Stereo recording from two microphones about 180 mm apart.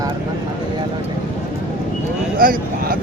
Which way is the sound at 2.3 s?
55° right (ahead or behind).